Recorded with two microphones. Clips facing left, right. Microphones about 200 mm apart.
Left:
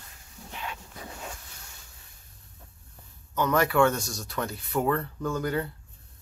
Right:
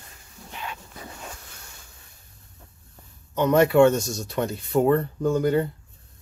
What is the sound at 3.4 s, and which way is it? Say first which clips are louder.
Speech: right 6 dB; 25° right (ahead or behind).